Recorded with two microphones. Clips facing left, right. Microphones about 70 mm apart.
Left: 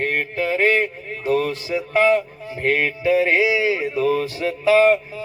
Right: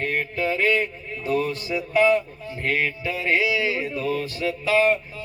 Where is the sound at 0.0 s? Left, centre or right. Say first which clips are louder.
Left 3 dB; left.